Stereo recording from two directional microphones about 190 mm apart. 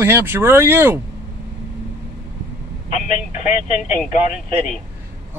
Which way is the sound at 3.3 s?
40° left (ahead or behind).